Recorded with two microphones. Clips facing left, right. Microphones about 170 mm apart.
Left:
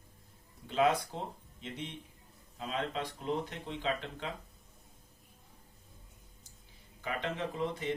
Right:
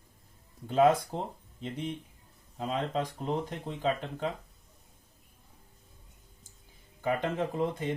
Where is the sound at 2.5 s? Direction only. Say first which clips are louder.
Right 5 dB; 40° right (ahead or behind).